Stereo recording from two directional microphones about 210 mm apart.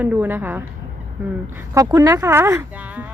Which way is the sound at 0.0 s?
5° right (ahead or behind).